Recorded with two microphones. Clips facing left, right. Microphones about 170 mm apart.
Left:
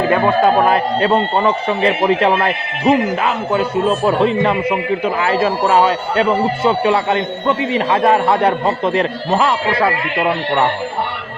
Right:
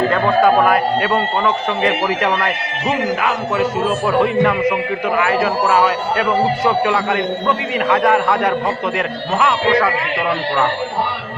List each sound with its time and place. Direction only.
0.1 s speech: 25° left (ahead or behind)